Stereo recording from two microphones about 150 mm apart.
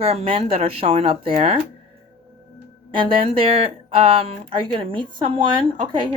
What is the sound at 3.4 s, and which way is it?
Speech, 40° right (ahead or behind).